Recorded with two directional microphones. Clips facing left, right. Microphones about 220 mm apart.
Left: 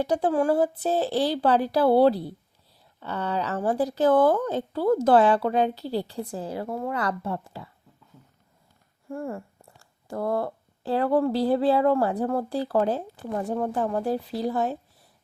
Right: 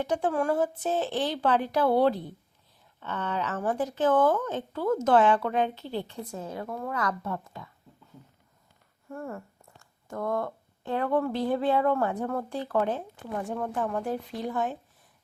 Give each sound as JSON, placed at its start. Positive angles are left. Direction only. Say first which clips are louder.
{"t": 0.0, "sound": "speech", "louder": "left 4 dB", "side_deg": 35}
{"t": 9.0, "sound": "speech", "louder": "left 5 dB", "side_deg": 30}